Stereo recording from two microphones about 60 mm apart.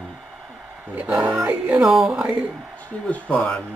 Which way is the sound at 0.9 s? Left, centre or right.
Right.